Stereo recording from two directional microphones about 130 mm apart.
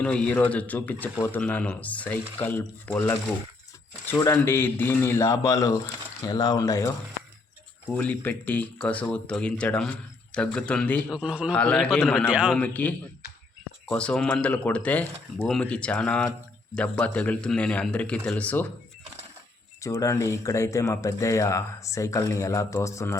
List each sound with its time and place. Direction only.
0.0 s speech: 10° left (ahead or behind)
4.2 s speech: 20° left (ahead or behind)
7.9 s speech: 10° left (ahead or behind)
11.1 s a man's voice: 10° right (ahead or behind)
11.5 s speech: 10° left (ahead or behind)
12.3 s a man's voice: 5° right (ahead or behind)
12.5 s speech: 10° left (ahead or behind)
19.8 s speech: 25° left (ahead or behind)